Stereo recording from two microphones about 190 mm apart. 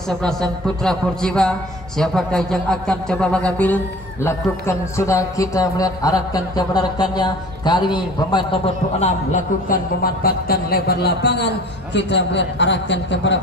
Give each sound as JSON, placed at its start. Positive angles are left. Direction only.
{"t": 0.2, "sound": "a man's voice", "side_deg": 0}
{"t": 9.0, "sound": "a man's voice", "side_deg": 45}